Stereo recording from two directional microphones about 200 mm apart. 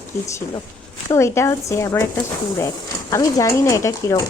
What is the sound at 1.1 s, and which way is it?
Speech, 15° left (ahead or behind).